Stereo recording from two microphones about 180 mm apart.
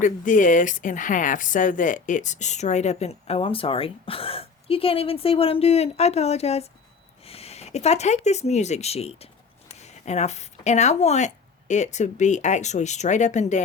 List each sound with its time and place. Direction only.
0.0 s speech: 45° left (ahead or behind)